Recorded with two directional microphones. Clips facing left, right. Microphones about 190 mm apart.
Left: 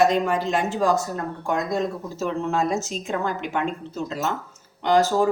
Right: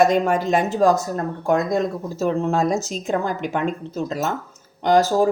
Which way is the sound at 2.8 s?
40° right (ahead or behind).